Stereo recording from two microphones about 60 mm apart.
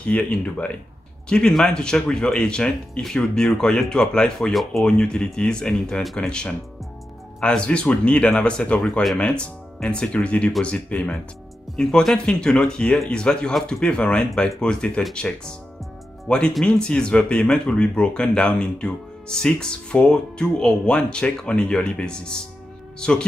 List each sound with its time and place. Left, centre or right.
0.0 s speech: centre
11.7 s speech: centre